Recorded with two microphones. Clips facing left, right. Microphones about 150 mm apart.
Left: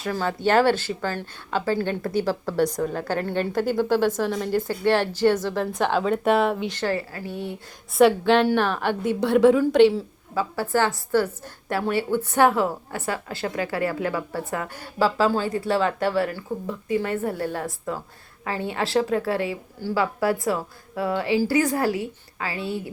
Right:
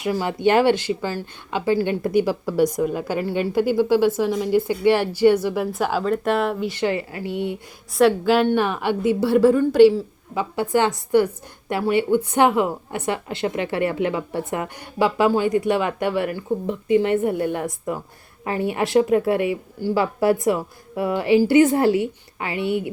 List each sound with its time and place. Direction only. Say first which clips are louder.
0.0 s speech: right 4 dB; 15° right (ahead or behind)
6.7 s a woman's voice: right 3 dB; 20° right (ahead or behind)
7.9 s speech: even; centre (ahead or behind)
10.3 s a woman's voice: right 2 dB; 20° right (ahead or behind)